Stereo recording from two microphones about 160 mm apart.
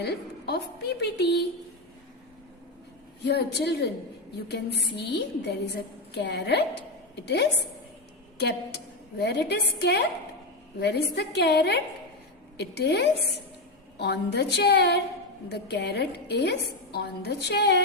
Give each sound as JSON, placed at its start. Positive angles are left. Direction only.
{"t": 0.0, "sound": "a woman's voice", "side_deg": 90}
{"t": 3.2, "sound": "a woman's voice", "side_deg": 90}
{"t": 4.9, "sound": "a woman's voice", "side_deg": 90}